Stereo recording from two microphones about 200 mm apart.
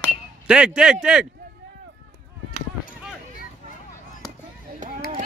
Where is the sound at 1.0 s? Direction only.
5° right (ahead or behind).